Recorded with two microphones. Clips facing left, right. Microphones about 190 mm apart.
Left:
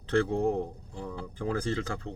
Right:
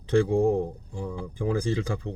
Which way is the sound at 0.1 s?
15° right (ahead or behind).